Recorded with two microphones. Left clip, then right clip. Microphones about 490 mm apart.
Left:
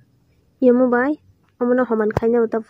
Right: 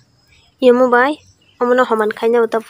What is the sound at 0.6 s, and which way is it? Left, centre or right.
A woman's voice, left.